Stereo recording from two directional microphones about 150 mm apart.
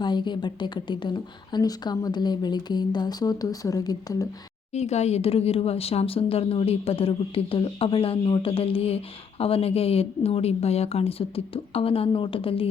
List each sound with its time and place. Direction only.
0.0 s a woman's voice: 30° left (ahead or behind)
4.7 s speech: 45° left (ahead or behind)